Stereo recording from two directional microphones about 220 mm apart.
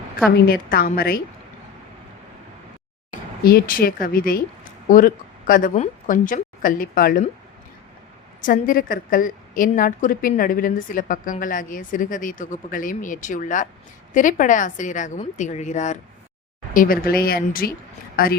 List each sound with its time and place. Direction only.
0.3 s a woman's voice: 45° left (ahead or behind)
3.1 s a woman's voice: 40° left (ahead or behind)
8.4 s a woman's voice: 40° left (ahead or behind)